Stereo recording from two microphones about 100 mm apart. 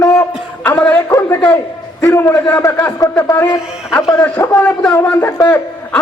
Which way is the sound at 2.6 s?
30° left (ahead or behind).